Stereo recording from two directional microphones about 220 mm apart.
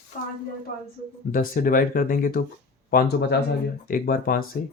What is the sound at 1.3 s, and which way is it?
Speech, 40° left (ahead or behind).